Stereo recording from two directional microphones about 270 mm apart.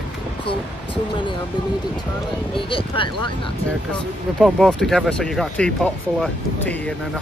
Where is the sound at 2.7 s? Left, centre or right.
Centre.